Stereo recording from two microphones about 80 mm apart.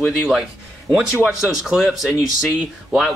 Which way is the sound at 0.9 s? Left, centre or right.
Centre.